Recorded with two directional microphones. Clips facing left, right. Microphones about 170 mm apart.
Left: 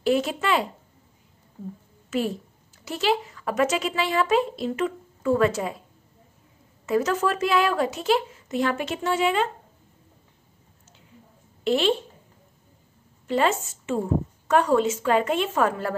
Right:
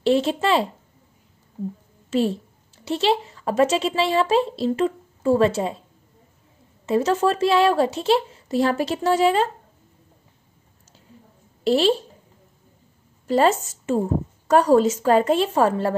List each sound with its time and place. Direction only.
0.0 s speech: 30° right (ahead or behind)
2.0 s speech: 30° right (ahead or behind)
6.9 s speech: 30° right (ahead or behind)
11.6 s speech: 35° right (ahead or behind)
13.3 s speech: 40° right (ahead or behind)